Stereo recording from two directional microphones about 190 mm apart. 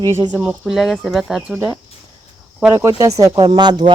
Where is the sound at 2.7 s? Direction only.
20° right (ahead or behind).